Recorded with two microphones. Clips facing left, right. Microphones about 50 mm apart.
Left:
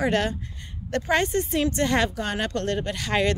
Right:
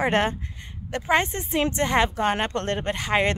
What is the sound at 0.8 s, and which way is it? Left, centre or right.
Speech, centre.